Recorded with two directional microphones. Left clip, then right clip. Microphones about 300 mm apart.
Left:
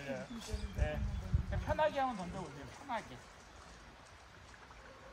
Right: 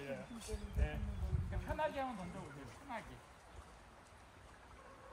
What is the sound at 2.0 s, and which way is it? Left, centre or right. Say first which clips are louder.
Speech: left 6 dB; centre.